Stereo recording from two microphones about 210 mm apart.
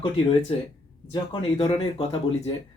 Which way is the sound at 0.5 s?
25° left (ahead or behind).